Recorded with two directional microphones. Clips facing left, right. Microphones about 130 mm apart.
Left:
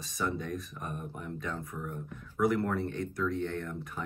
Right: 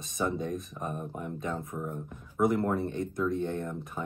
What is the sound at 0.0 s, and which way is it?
Speech, 20° right (ahead or behind).